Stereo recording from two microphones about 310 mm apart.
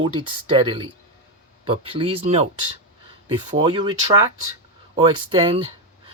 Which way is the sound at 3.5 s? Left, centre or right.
Centre.